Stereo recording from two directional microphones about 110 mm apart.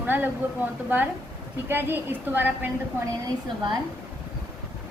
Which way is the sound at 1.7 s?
20° right (ahead or behind).